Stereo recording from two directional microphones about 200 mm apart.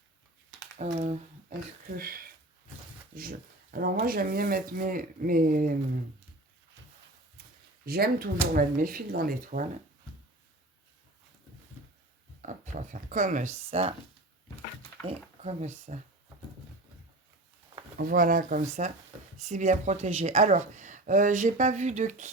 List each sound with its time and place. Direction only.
0.9 s speech: 35° right (ahead or behind)
2.0 s speech: 50° right (ahead or behind)
7.9 s speech: 50° right (ahead or behind)
12.4 s speech: 40° right (ahead or behind)
15.0 s speech: 35° right (ahead or behind)
17.9 s speech: 45° right (ahead or behind)